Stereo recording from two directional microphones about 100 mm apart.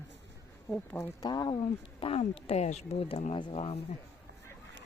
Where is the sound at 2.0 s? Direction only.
75° left (ahead or behind).